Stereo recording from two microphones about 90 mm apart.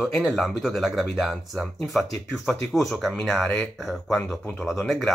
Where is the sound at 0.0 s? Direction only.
Centre (ahead or behind).